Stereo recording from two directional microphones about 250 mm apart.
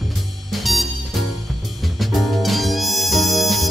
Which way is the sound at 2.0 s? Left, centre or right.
Centre.